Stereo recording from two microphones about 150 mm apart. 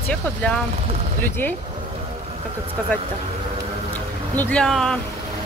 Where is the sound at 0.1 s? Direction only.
5° left (ahead or behind).